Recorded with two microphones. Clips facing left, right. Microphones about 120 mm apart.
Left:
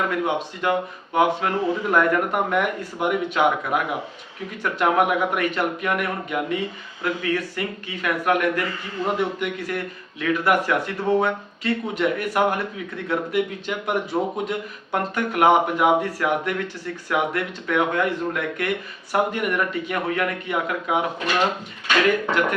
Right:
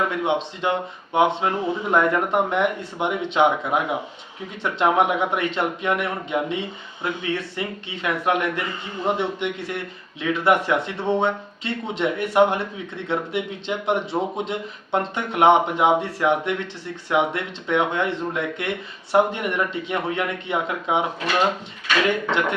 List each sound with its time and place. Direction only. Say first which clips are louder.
0.1 s speech: right 1 dB; 25° right (ahead or behind)
4.6 s speech: right 1 dB; 25° right (ahead or behind)
22.3 s speech: left 1 dB; 25° right (ahead or behind)